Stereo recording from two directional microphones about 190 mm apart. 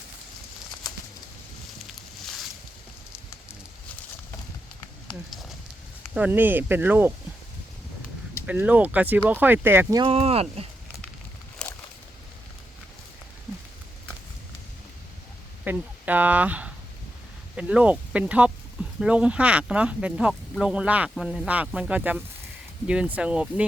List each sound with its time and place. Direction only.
5.0 s speech: centre (ahead or behind)
8.4 s speech: 10° right (ahead or behind)
10.0 s speech: 30° right (ahead or behind)
11.6 s a sound: 5° left (ahead or behind)
15.6 s speech: 10° right (ahead or behind)